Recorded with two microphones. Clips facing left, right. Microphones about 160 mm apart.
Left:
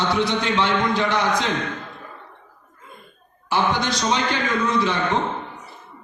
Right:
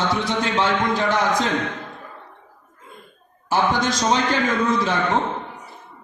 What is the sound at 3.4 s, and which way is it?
Speech, 45° right (ahead or behind).